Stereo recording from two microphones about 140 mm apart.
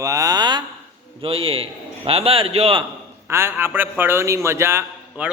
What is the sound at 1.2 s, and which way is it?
A man's voice, 40° right (ahead or behind).